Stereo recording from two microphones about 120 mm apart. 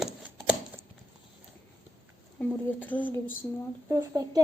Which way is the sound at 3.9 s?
25° right (ahead or behind).